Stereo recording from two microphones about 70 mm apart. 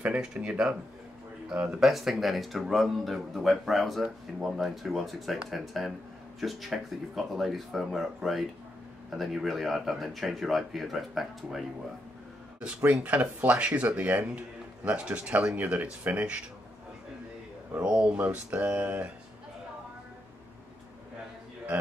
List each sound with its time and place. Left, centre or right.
0.0 s speech: centre
1.9 s speech: centre
12.5 s speech: centre
17.8 s speech: centre